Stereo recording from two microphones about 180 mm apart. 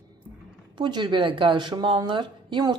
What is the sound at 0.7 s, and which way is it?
A woman's voice, 25° right (ahead or behind).